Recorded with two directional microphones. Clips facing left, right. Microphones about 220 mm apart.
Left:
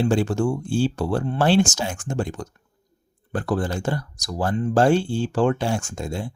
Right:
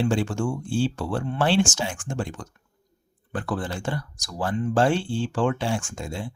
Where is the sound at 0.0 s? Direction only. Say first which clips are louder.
Left 3 dB; 40° left (ahead or behind).